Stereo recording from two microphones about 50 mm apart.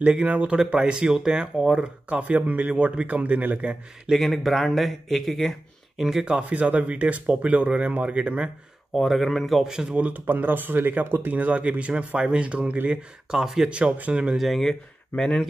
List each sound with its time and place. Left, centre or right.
0.0 s speech: right
4.1 s speech: centre
6.0 s speech: centre
6.5 s speech: right
8.9 s speech: centre
9.7 s speech: centre
9.9 s speech: right
11.3 s speech: right
12.9 s speech: centre
13.7 s speech: right
14.3 s speech: centre
15.1 s speech: centre